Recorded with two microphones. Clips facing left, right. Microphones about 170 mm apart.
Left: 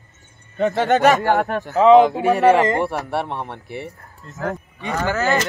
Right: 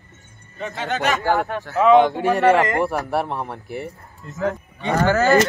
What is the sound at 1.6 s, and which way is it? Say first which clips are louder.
Speech: left 3 dB; 20° left (ahead or behind).